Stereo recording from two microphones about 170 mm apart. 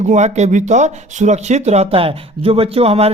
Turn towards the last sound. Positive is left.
turn(degrees=-35)  # may be behind; listen again after turning